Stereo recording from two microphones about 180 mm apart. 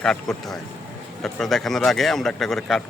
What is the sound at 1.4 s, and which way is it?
Speech, centre (ahead or behind).